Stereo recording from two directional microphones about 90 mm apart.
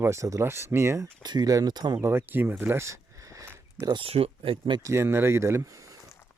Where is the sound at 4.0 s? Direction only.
90° right.